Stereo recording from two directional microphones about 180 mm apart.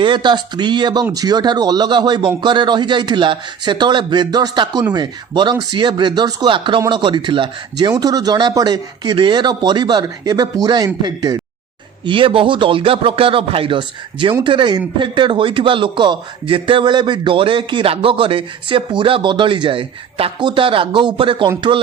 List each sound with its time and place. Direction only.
0.0 s a man's voice: 25° right (ahead or behind)